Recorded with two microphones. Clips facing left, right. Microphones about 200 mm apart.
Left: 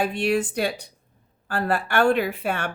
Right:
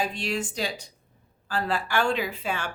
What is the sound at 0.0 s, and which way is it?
Speech, 60° left (ahead or behind).